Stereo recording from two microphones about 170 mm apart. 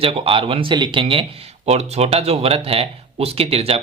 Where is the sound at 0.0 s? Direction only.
30° right (ahead or behind).